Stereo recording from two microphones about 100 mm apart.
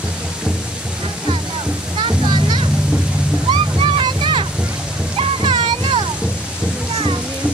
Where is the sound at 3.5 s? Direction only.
60° right (ahead or behind).